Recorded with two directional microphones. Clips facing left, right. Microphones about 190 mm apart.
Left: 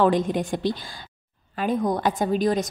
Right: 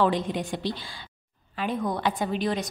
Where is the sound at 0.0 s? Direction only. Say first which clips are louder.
Left 4 dB; 50° left (ahead or behind).